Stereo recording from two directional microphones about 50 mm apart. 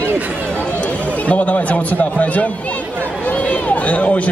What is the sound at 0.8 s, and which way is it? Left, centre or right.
A man's voice, left.